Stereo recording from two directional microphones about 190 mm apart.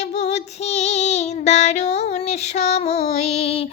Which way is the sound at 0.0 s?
35° left (ahead or behind).